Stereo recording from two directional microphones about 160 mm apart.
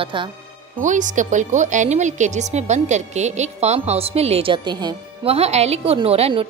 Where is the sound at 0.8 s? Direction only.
50° right (ahead or behind); by 5.3 s 25° right (ahead or behind).